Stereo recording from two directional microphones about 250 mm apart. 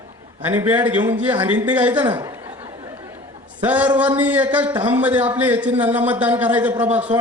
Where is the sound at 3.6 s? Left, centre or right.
Centre.